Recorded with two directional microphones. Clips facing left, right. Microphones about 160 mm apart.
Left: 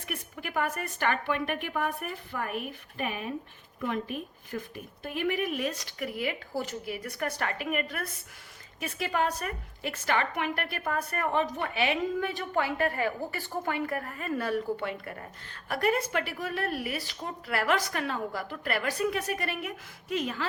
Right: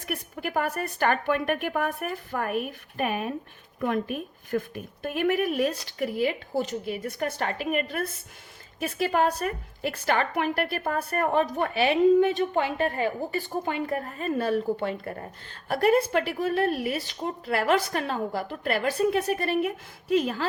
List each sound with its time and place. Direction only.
0.0 s a woman's voice: 40° right (ahead or behind)
12.3 s a woman's voice: 20° right (ahead or behind)